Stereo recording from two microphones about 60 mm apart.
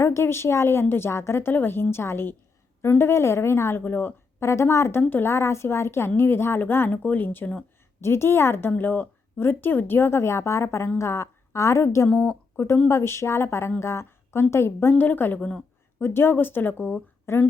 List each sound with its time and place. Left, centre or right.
0.0 s speech: left
4.4 s speech: left
5.3 s speech: left
8.0 s speech: left
8.8 s speech: left
12.0 s speech: left
12.5 s speech: left
15.4 s a woman's voice: centre
16.0 s a woman's voice: left